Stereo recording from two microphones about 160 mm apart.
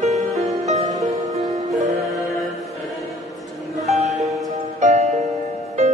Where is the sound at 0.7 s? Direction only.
45° right (ahead or behind).